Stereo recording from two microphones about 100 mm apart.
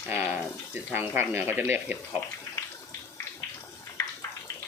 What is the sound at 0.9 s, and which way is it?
Speech, 20° right (ahead or behind).